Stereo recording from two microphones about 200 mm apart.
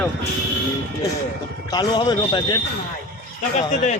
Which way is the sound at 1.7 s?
20° left (ahead or behind).